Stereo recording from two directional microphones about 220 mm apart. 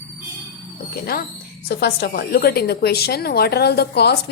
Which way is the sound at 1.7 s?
45° left (ahead or behind).